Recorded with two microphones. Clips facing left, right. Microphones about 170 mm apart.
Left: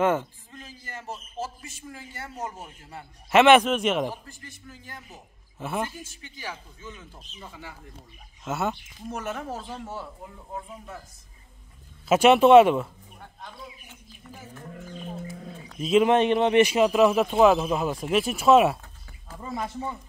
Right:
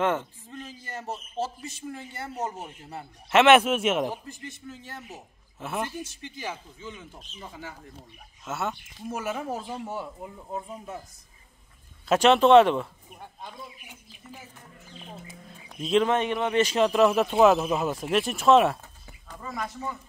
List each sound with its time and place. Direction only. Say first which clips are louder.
0.0 s speech: left 3 dB; 5° left (ahead or behind)
1.9 s a woman's voice: right 3 dB; 30° right (ahead or behind)
3.3 s speech: left 1 dB; centre (ahead or behind)
4.1 s a woman's voice: right 3 dB; 20° right (ahead or behind)
5.1 s a woman's voice: right 3 dB; centre (ahead or behind)
6.4 s a woman's voice: right 2 dB; 20° right (ahead or behind)
8.5 s speech: left 3 dB; centre (ahead or behind)
12.1 s speech: left 2 dB; 10° left (ahead or behind)
13.2 s bird: right 1 dB; 15° right (ahead or behind)
15.8 s speech: left 3 dB; 5° left (ahead or behind)
16.1 s a man's voice: left 5 dB; 20° left (ahead or behind)
16.6 s speech: left 1 dB; 5° left (ahead or behind)
19.4 s a man's voice: left 2 dB; 25° left (ahead or behind)